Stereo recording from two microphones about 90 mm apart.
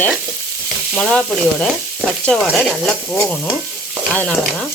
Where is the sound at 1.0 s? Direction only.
10° left (ahead or behind).